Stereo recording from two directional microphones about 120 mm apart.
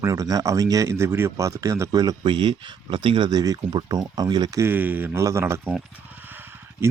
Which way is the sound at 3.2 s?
35° right (ahead or behind).